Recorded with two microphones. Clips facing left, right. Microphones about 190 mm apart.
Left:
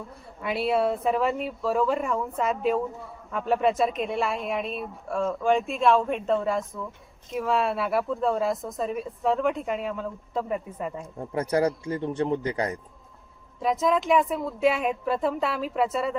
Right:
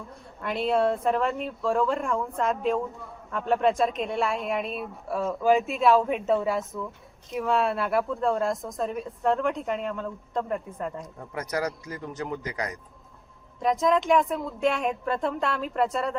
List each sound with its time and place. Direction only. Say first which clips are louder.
0.4 s a woman's voice: even; 5° left (ahead or behind)
11.2 s a man's voice: left 6 dB; 30° left (ahead or behind)
13.6 s a woman's voice: right 1 dB; centre (ahead or behind)